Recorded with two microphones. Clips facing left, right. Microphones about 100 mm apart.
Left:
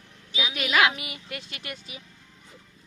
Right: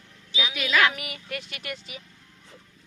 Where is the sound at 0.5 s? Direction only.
30° left (ahead or behind).